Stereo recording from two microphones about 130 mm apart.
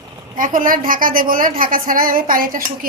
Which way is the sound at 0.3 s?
90° right.